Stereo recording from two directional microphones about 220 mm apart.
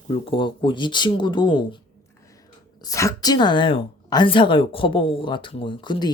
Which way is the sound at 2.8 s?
15° left (ahead or behind).